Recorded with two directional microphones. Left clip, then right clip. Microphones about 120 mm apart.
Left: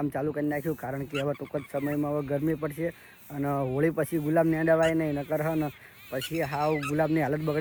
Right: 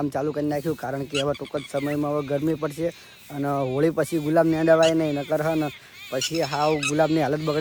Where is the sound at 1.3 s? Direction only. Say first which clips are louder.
Right 5 dB; 55° right (ahead or behind).